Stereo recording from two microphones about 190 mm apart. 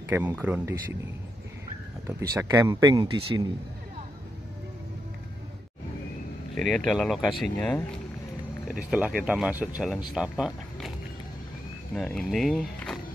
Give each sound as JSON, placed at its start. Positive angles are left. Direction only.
{"t": 0.1, "sound": "speech", "side_deg": -10}
{"t": 2.0, "sound": "speech", "side_deg": -15}
{"t": 6.5, "sound": "speech", "side_deg": 5}
{"t": 8.6, "sound": "speech", "side_deg": -5}
{"t": 11.9, "sound": "speech", "side_deg": 0}